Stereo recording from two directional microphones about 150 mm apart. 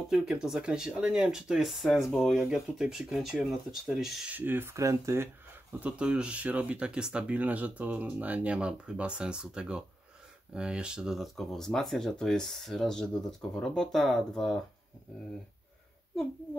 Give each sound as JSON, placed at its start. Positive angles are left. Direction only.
{"t": 0.1, "sound": "speech", "side_deg": -5}
{"t": 4.4, "sound": "speech", "side_deg": -15}